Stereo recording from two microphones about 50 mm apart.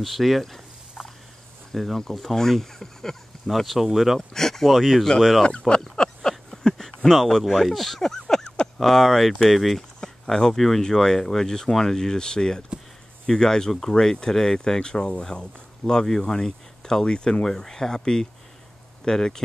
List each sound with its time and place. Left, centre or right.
0.0 s speech: centre
1.7 s speech: centre
4.3 s speech: centre
5.8 s a sound: centre
8.7 s speech: centre